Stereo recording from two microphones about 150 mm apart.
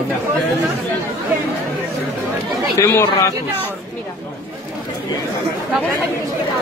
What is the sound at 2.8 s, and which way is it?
Speech, 20° left (ahead or behind).